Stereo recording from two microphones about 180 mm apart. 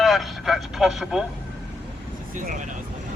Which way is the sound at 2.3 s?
45° right (ahead or behind).